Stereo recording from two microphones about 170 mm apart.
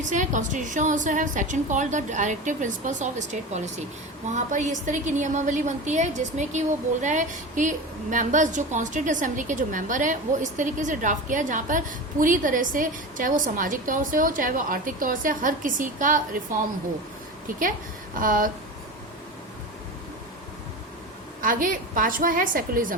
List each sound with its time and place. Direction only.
0.0 s a woman's voice: 45° right (ahead or behind)
18.2 s a woman's voice: 55° right (ahead or behind)
21.4 s a woman's voice: 55° right (ahead or behind)